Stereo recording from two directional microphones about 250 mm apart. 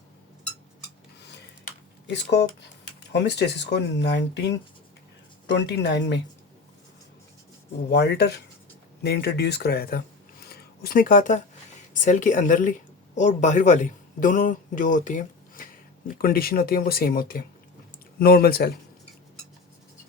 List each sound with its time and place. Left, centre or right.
1.2 s a sound: left
2.1 s speech: left
5.5 s speech: left
7.9 s speech: left
10.4 s a sound: left
11.9 s a man's voice: left